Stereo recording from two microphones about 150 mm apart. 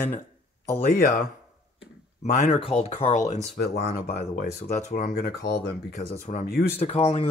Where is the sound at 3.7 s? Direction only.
90° left.